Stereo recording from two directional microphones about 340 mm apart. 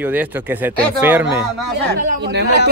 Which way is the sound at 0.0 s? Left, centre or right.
Centre.